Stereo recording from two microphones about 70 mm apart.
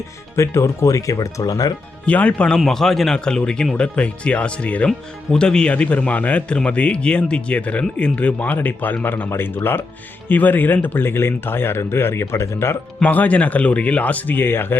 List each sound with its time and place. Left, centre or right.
0.3 s speech: left
2.0 s speech: left
2.6 s speech: centre; by 12.7 s left
13.0 s speech: left